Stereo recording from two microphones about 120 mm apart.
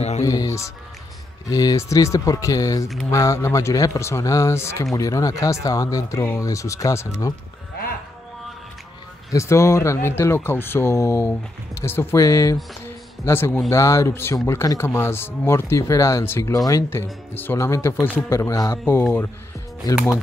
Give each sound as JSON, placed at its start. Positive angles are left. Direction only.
{"t": 0.2, "sound": "speech", "side_deg": 30}
{"t": 9.3, "sound": "speech", "side_deg": 25}
{"t": 12.8, "sound": "music", "side_deg": 20}
{"t": 13.7, "sound": "speech", "side_deg": 25}